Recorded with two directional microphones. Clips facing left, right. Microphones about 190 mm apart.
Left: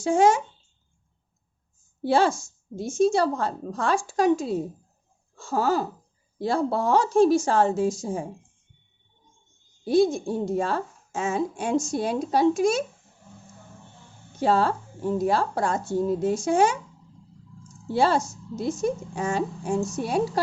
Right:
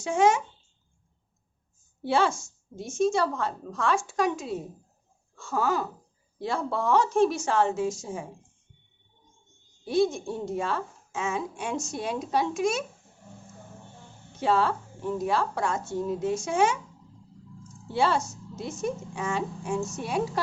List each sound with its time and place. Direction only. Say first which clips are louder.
0.0 s a woman's voice: left 3 dB; 35° left (ahead or behind)
2.0 s a woman's voice: left 4 dB; 35° left (ahead or behind)
9.8 s a woman's voice: left 4 dB; 35° left (ahead or behind)
14.3 s a woman's voice: left 3 dB; 40° left (ahead or behind)
17.9 s a woman's voice: left 3 dB; 40° left (ahead or behind)